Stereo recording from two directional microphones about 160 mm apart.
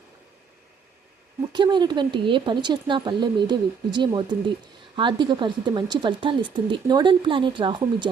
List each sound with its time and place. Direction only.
1.5 s speech: 30° right (ahead or behind)